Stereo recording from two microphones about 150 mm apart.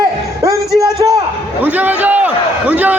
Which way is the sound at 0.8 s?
20° right (ahead or behind).